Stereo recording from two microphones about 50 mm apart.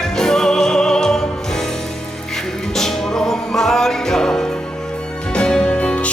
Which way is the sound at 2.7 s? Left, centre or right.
Centre.